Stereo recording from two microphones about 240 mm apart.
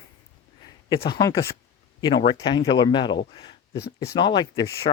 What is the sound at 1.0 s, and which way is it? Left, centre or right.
Speech, centre.